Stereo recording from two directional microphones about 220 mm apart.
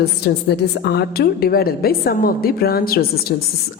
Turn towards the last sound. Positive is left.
turn(degrees=45)  # may be behind; listen again after turning